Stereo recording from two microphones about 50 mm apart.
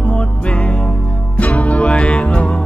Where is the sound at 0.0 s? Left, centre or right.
Left.